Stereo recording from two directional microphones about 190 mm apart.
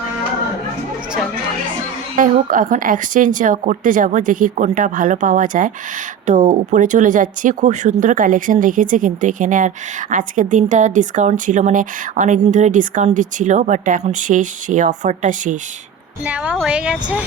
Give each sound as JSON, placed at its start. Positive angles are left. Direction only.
{"t": 2.1, "sound": "a woman's voice", "side_deg": -45}
{"t": 16.2, "sound": "a woman's voice", "side_deg": -5}